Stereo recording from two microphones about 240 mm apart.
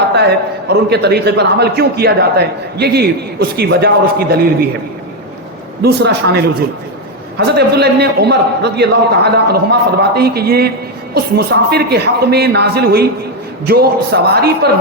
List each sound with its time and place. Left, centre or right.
0.1 s a man's voice: right
5.8 s a man's voice: right